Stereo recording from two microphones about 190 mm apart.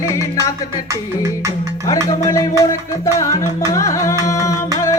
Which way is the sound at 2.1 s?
15° left (ahead or behind).